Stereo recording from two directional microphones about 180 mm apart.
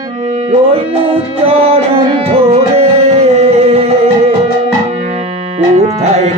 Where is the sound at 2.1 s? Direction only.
35° right (ahead or behind).